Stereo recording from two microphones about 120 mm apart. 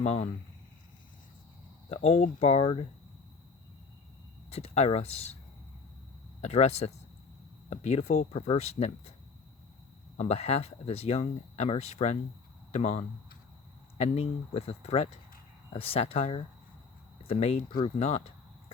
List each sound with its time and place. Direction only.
0.0 s speech: 65° left (ahead or behind)
2.0 s speech: 70° left (ahead or behind); by 2.8 s 55° left (ahead or behind)
4.5 s speech: 60° left (ahead or behind)
6.4 s speech: 60° left (ahead or behind)
10.2 s speech: 60° left (ahead or behind)